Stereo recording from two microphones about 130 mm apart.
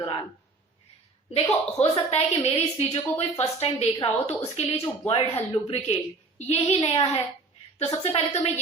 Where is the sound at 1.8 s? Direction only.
55° left (ahead or behind).